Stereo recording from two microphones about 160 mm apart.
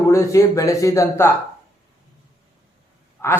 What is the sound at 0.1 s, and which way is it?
A man's voice, 20° left (ahead or behind).